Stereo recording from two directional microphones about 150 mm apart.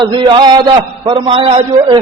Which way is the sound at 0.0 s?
30° right (ahead or behind).